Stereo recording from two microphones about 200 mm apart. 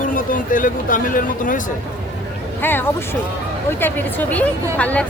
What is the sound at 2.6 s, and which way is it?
Speech, 10° left (ahead or behind).